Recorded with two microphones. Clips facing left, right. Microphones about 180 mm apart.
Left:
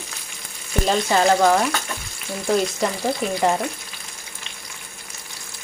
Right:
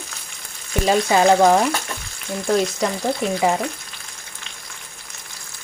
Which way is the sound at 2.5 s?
5° left (ahead or behind).